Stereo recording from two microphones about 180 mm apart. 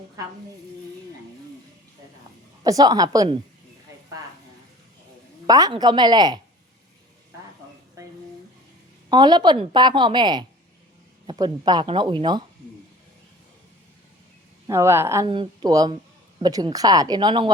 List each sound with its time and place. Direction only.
2.6 s a woman's voice: 20° right (ahead or behind)
5.5 s a woman's voice: 20° right (ahead or behind)
9.0 s a woman's voice: 25° right (ahead or behind)
14.7 s a woman's voice: 15° right (ahead or behind)